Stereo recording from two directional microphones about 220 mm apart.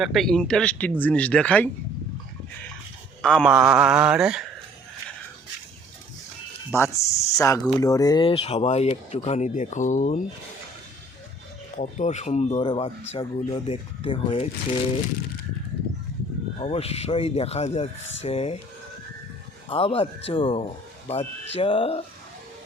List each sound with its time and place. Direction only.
0.0 s speech: centre (ahead or behind)
3.2 s speech: 5° left (ahead or behind)
6.7 s speech: 10° left (ahead or behind); by 10.2 s 35° left (ahead or behind)
11.8 s speech: 30° left (ahead or behind)
16.6 s speech: 25° left (ahead or behind)
19.6 s speech: 25° left (ahead or behind)